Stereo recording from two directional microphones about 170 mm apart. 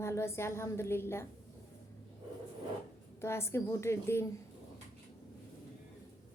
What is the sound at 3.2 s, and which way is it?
A woman's voice, 15° left (ahead or behind).